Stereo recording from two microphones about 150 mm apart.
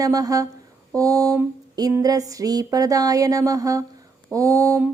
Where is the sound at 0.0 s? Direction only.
25° right (ahead or behind).